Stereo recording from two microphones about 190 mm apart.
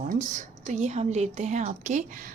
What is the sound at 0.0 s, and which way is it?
A woman's voice, 45° right (ahead or behind).